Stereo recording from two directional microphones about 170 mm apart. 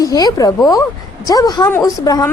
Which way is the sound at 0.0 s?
20° left (ahead or behind).